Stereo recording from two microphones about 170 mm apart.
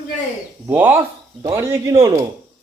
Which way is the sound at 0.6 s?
10° right (ahead or behind).